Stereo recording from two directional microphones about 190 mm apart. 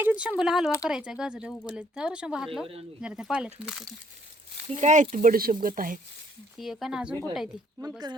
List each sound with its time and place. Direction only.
0.0 s speech: 5° right (ahead or behind)
4.6 s speech: 35° right (ahead or behind)
6.6 s speech: centre (ahead or behind)
7.8 s speech: 20° right (ahead or behind)